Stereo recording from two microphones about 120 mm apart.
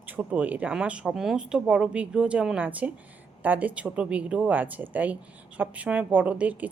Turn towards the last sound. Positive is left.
turn(degrees=-10)  # may be behind; listen again after turning